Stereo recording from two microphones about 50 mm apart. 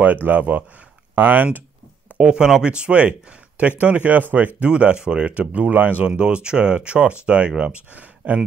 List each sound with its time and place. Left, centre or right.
0.0 s speech: right
2.1 s speech: centre; by 4.5 s right
4.6 s speech: right
6.0 s speech: right